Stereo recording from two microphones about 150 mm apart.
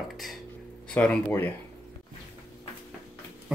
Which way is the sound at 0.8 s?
10° left (ahead or behind).